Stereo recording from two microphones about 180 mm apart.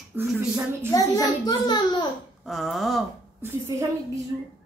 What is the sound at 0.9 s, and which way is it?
A child's voice, 20° left (ahead or behind).